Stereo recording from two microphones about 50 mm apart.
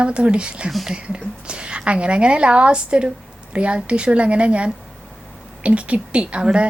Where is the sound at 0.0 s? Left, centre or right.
Right.